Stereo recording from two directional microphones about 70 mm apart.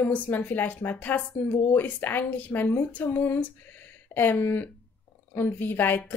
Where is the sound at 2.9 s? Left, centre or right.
Left.